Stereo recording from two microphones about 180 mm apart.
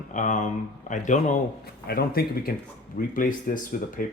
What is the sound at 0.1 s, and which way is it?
Speech, 45° left (ahead or behind).